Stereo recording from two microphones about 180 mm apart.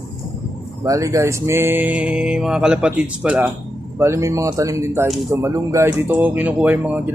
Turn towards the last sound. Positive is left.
turn(degrees=-10)  # may be behind; listen again after turning